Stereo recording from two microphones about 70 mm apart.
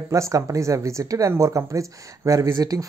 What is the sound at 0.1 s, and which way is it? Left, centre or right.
Speech, right.